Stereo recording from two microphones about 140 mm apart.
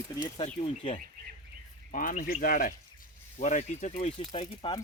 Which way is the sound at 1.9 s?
80° left.